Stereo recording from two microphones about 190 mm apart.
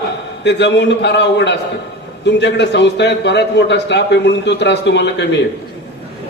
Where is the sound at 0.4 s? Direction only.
65° left (ahead or behind).